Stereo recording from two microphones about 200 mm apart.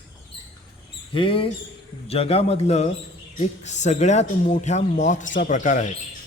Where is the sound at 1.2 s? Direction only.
25° left (ahead or behind).